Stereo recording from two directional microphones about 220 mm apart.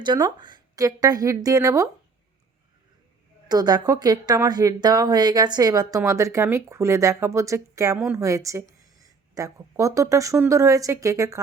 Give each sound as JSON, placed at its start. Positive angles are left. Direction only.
{"t": 0.0, "sound": "speech", "side_deg": -20}
{"t": 3.5, "sound": "speech", "side_deg": -20}